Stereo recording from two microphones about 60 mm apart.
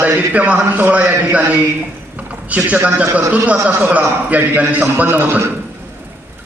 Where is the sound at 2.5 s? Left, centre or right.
Right.